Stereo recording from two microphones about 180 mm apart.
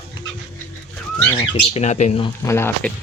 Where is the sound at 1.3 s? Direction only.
35° left (ahead or behind).